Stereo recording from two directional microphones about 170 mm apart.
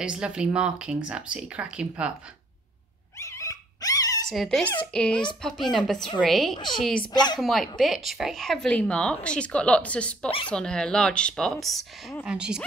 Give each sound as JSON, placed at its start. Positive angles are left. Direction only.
{"t": 0.0, "sound": "a woman's voice", "side_deg": -5}
{"t": 3.2, "sound": "dog", "side_deg": 20}
{"t": 4.3, "sound": "a woman's voice", "side_deg": 5}
{"t": 6.5, "sound": "a woman's voice", "side_deg": 25}
{"t": 6.8, "sound": "a woman's voice", "side_deg": 5}
{"t": 7.1, "sound": "a woman's voice", "side_deg": 25}
{"t": 7.3, "sound": "a woman's voice", "side_deg": 0}